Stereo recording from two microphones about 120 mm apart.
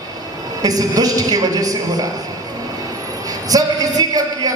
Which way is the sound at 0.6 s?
30° right (ahead or behind).